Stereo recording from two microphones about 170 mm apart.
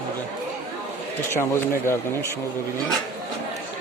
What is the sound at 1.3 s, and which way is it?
Speech, 15° left (ahead or behind).